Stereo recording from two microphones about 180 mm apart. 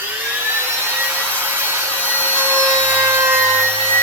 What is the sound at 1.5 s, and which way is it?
Wood, 10° right (ahead or behind).